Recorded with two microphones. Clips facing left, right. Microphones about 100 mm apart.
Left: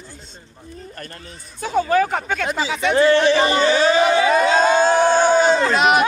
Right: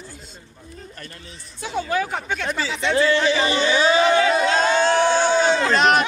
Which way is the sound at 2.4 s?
15° left (ahead or behind).